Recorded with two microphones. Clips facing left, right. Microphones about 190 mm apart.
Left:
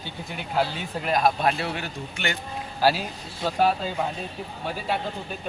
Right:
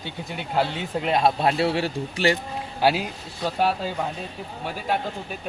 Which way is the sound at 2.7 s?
20° right (ahead or behind).